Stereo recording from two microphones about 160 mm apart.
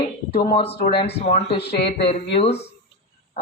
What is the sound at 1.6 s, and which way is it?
Speech, 90° left.